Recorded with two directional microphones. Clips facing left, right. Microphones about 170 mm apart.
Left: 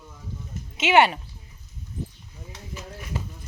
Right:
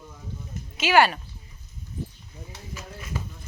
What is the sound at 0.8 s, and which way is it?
Speech, 25° left (ahead or behind).